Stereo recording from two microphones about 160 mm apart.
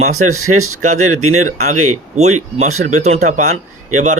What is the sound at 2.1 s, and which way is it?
Speech, 45° right (ahead or behind).